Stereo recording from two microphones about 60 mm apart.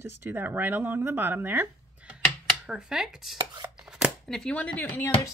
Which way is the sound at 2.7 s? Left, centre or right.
Centre.